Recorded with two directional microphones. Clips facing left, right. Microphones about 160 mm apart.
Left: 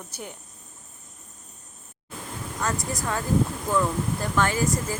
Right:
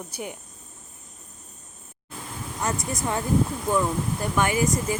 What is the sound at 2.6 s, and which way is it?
Speech, 20° right (ahead or behind).